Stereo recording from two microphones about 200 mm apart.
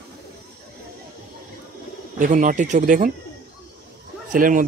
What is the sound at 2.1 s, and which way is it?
Speech, 40° right (ahead or behind).